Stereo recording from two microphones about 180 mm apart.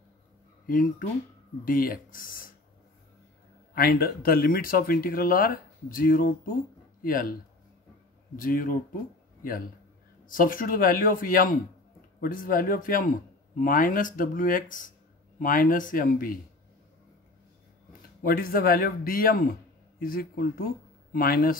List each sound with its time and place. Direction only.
0.7 s speech: 50° left (ahead or behind)
3.7 s speech: 55° left (ahead or behind)
8.4 s speech: 50° left (ahead or behind)
10.2 s speech: 50° left (ahead or behind)
18.2 s speech: 55° left (ahead or behind)